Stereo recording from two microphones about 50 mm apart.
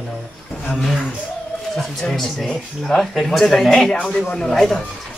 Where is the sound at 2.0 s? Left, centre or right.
Centre.